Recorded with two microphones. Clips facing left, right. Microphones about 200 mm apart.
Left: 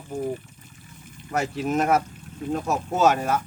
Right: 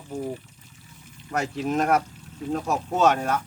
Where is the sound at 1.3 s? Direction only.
Centre (ahead or behind).